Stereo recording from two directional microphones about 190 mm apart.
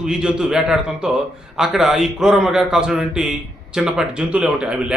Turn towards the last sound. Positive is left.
turn(degrees=-5)  # may be behind; listen again after turning